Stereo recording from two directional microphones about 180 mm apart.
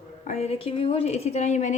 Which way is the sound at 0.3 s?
35° left (ahead or behind).